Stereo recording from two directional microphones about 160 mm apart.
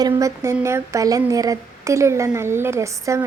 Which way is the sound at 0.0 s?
20° right (ahead or behind).